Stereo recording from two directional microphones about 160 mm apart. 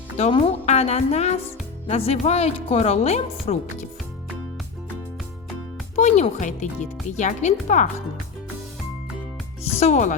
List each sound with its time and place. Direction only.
0.2 s speech: 35° left (ahead or behind)
6.0 s speech: 45° left (ahead or behind)
9.7 s speech: 45° left (ahead or behind)